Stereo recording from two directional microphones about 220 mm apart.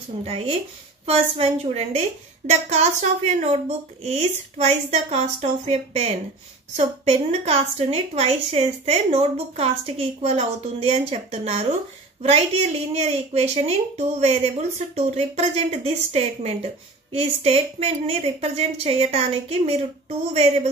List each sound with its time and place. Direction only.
0.2 s a woman's voice: 25° right (ahead or behind)